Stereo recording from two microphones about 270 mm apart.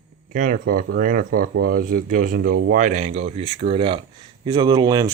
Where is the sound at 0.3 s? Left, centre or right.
Right.